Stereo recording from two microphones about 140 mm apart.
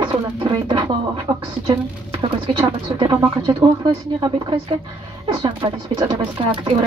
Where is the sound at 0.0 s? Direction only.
35° right (ahead or behind).